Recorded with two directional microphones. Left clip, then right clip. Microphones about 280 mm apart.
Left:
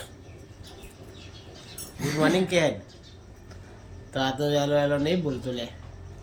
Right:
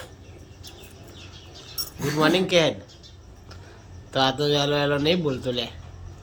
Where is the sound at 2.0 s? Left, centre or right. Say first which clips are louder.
Right 3 dB; centre.